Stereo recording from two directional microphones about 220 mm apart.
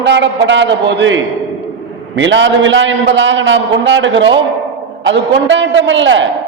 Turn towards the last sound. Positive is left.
turn(degrees=-55)  # may be behind; listen again after turning